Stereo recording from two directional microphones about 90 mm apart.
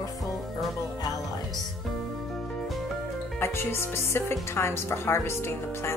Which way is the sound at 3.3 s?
30° left (ahead or behind).